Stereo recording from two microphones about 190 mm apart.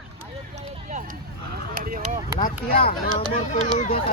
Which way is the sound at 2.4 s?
50° left (ahead or behind).